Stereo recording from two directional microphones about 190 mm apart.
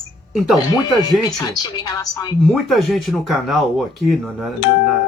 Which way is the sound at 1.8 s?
20° left (ahead or behind).